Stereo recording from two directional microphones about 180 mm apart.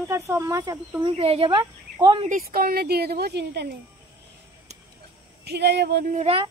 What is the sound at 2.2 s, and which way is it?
Speech, 50° right (ahead or behind).